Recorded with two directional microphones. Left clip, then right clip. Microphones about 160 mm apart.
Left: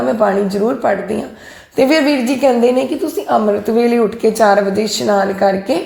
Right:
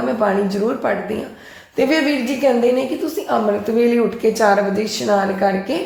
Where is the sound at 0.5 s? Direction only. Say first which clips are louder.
Left 4 dB; 35° left (ahead or behind).